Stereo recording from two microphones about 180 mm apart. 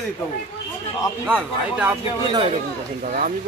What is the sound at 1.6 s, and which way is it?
Speech, 5° right (ahead or behind).